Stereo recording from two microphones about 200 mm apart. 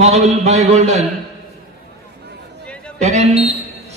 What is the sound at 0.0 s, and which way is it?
A man's voice, 35° right (ahead or behind).